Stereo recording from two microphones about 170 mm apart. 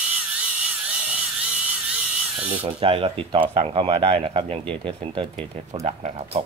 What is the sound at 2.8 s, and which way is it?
Speech, 30° right (ahead or behind).